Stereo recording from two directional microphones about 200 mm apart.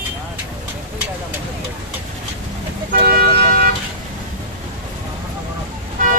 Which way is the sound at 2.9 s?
50° right (ahead or behind).